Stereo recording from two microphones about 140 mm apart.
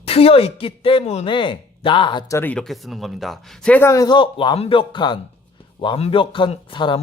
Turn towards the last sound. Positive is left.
turn(degrees=35)  # may be behind; listen again after turning